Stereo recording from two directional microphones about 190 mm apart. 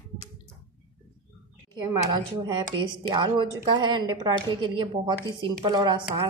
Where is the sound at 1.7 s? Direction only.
20° right (ahead or behind).